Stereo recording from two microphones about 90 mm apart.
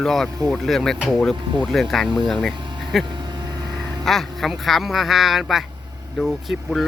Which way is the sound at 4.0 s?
5° left (ahead or behind).